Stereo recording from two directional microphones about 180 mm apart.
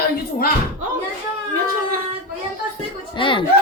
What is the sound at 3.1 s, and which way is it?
Speech, 30° left (ahead or behind).